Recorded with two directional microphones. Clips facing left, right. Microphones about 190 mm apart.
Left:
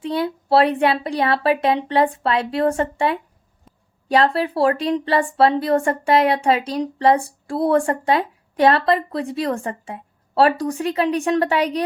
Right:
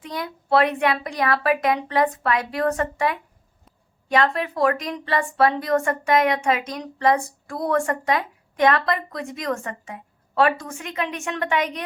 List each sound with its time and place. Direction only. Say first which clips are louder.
0.0 s speech: left 9 dB; 30° left (ahead or behind)